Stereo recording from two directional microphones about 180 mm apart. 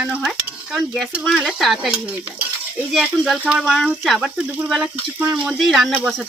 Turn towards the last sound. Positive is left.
turn(degrees=0)  # may be behind; listen again after turning